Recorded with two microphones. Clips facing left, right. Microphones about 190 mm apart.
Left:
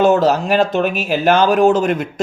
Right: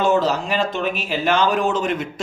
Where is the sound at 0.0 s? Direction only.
50° left (ahead or behind).